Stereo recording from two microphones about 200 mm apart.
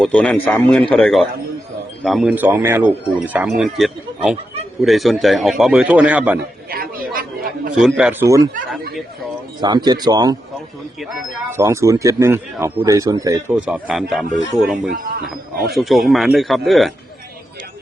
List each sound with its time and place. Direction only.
0.0 s speech: 5° left (ahead or behind)
6.7 s chatter: 45° right (ahead or behind)
7.8 s speech: centre (ahead or behind)
9.6 s speech: 20° right (ahead or behind)
11.5 s speech: 15° right (ahead or behind)
14.8 s speech: 55° right (ahead or behind)
15.6 s speech: centre (ahead or behind)